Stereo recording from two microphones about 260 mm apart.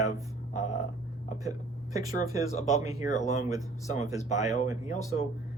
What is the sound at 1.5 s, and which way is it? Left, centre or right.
Speech, centre.